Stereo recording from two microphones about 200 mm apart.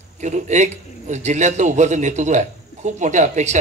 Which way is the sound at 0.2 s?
35° right (ahead or behind).